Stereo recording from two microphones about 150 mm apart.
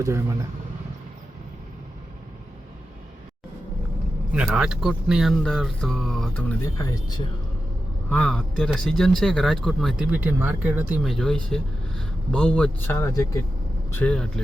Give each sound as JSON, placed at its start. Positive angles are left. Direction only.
{"t": 0.0, "sound": "speech", "side_deg": -20}
{"t": 4.3, "sound": "speech", "side_deg": -5}
{"t": 6.7, "sound": "speech", "side_deg": 20}
{"t": 8.1, "sound": "speech", "side_deg": 5}
{"t": 10.1, "sound": "speech", "side_deg": -10}
{"t": 11.1, "sound": "speech", "side_deg": 5}
{"t": 13.0, "sound": "speech", "side_deg": 20}